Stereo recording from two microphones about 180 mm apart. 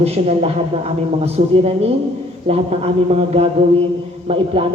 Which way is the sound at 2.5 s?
35° right (ahead or behind).